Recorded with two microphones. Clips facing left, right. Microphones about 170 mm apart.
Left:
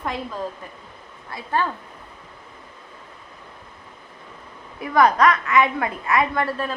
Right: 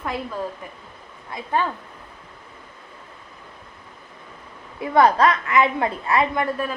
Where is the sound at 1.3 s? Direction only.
20° right (ahead or behind).